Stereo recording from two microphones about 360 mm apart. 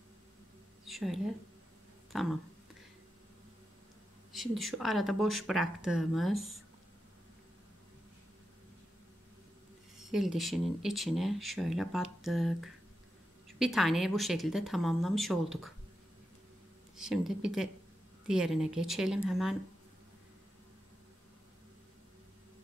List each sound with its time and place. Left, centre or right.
0.8 s speech: centre
4.3 s speech: centre
9.9 s speech: centre
16.9 s speech: centre